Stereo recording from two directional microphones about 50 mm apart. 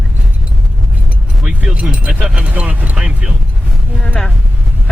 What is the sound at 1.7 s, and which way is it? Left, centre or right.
Speech, right.